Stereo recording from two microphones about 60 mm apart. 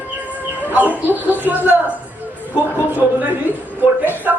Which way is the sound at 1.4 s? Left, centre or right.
Right.